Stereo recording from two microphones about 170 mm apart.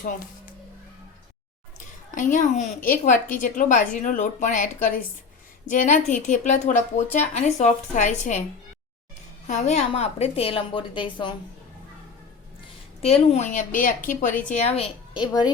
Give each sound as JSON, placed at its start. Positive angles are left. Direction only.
{"t": 1.8, "sound": "a woman's voice", "side_deg": 50}
{"t": 9.5, "sound": "a woman's voice", "side_deg": 45}
{"t": 13.0, "sound": "a woman's voice", "side_deg": 35}